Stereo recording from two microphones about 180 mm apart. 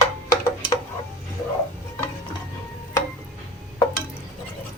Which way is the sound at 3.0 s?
15° left (ahead or behind).